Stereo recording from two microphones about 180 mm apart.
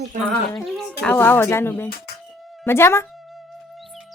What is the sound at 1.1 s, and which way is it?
Speech, 10° left (ahead or behind).